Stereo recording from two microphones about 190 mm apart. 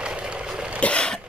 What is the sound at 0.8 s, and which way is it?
Throat clearing, 5° left (ahead or behind).